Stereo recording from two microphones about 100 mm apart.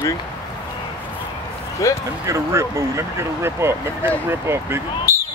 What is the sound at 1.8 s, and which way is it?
Speech, 35° left (ahead or behind).